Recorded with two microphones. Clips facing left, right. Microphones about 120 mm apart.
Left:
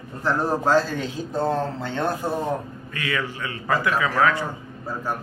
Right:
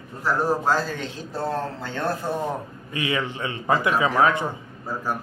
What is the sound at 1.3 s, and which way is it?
Speech, 25° left (ahead or behind).